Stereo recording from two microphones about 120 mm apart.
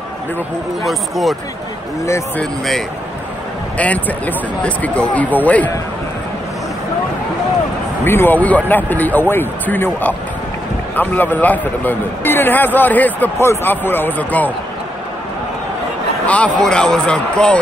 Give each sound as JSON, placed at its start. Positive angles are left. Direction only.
{"t": 0.8, "sound": "speech", "side_deg": 0}
{"t": 3.7, "sound": "a man's voice", "side_deg": 10}
{"t": 8.0, "sound": "a man's voice", "side_deg": 20}
{"t": 16.3, "sound": "a man's voice", "side_deg": 10}